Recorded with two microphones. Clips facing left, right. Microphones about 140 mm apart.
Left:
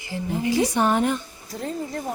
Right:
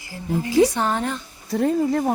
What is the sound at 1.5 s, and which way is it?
Speech, 75° right (ahead or behind).